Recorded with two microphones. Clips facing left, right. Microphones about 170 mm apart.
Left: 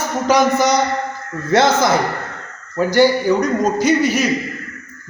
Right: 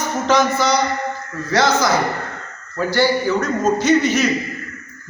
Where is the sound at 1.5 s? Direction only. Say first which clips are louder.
Left 2 dB; 25° left (ahead or behind).